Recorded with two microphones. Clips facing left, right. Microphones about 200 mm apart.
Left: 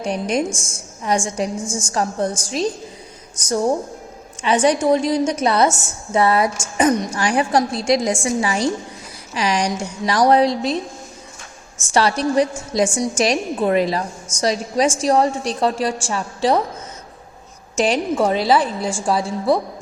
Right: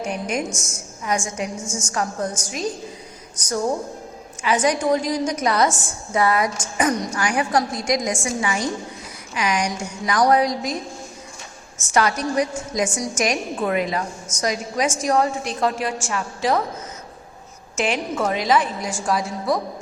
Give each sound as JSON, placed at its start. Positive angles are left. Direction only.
{"t": 0.0, "sound": "a woman's voice", "side_deg": 35}
{"t": 4.4, "sound": "a woman's voice", "side_deg": 30}
{"t": 11.9, "sound": "a woman's voice", "side_deg": 30}
{"t": 17.7, "sound": "a woman's voice", "side_deg": 35}